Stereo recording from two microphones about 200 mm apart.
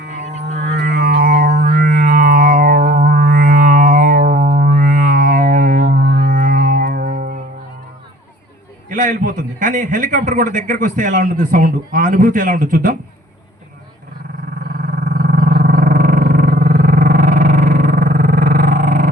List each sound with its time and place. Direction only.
0.8 s music: 50° right (ahead or behind)
8.9 s a man's voice: 40° right (ahead or behind)
15.2 s roar: 45° right (ahead or behind)